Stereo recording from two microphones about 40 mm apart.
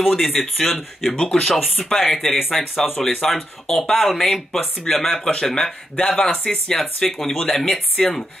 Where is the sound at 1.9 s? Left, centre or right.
Centre.